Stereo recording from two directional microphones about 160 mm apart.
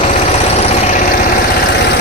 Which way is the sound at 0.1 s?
40° left (ahead or behind).